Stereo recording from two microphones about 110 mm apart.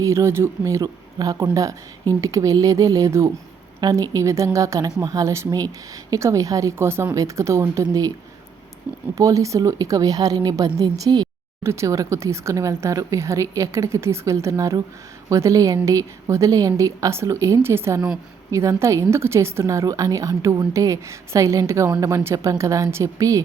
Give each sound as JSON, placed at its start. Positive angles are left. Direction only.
{"t": 0.0, "sound": "a woman's voice", "side_deg": -25}
{"t": 9.1, "sound": "speech", "side_deg": -30}
{"t": 11.6, "sound": "a woman's voice", "side_deg": -25}